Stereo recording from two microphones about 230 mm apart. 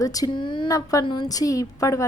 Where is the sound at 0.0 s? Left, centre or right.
Centre.